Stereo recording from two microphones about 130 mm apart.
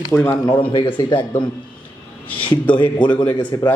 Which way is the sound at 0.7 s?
40° left (ahead or behind).